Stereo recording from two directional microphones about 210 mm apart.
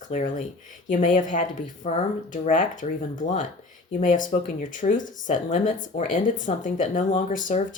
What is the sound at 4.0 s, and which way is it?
Speech, 40° left (ahead or behind).